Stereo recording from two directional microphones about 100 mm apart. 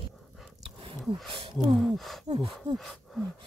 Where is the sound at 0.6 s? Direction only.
60° right (ahead or behind).